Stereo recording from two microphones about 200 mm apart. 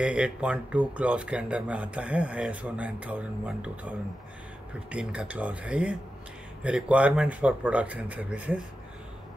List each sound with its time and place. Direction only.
0.0 s speech: 5° right (ahead or behind)
4.9 s speech: 5° right (ahead or behind)